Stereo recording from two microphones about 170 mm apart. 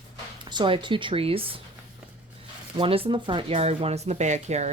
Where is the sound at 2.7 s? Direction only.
30° right (ahead or behind).